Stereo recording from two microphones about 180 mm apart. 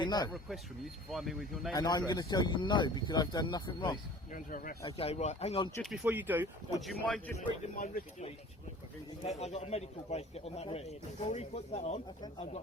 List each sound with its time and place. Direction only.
0.0 s speech: 25° left (ahead or behind)
1.1 s speech: centre (ahead or behind)
1.7 s speech: 20° left (ahead or behind)
4.3 s speech: 50° left (ahead or behind)
4.9 s speech: 35° left (ahead or behind)
5.8 s speech: centre (ahead or behind)
6.8 s speech: 5° left (ahead or behind)
7.3 s speech: 40° left (ahead or behind)
9.4 s speech: 35° left (ahead or behind)